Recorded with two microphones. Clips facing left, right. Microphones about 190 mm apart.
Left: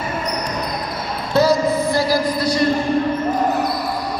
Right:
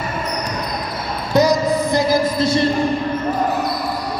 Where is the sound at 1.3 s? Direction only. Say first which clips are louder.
Even; 15° right (ahead or behind).